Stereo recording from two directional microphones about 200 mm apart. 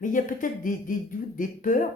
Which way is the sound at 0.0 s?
40° left (ahead or behind).